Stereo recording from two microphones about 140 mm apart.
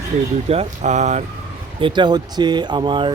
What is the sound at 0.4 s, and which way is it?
Speech, 45° right (ahead or behind).